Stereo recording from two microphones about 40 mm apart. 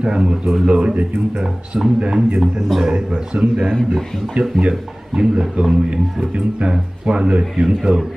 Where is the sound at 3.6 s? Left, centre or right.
Centre.